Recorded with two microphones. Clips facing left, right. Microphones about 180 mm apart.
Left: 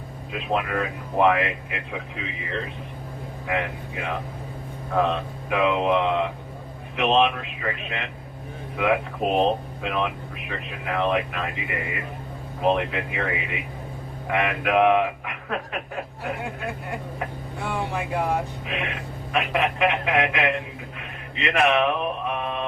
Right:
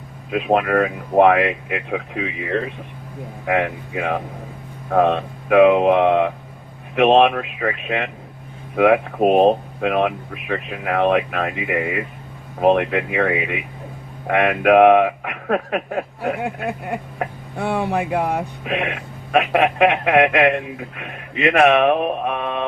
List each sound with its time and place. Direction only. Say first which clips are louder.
0.3 s speech: right 8 dB; 60° right (ahead or behind)